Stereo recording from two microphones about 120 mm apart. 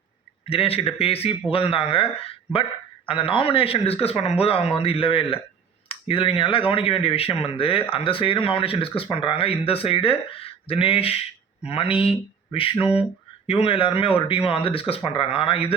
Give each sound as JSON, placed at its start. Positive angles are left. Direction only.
{"t": 0.4, "sound": "speech", "side_deg": 55}
{"t": 3.1, "sound": "speech", "side_deg": 50}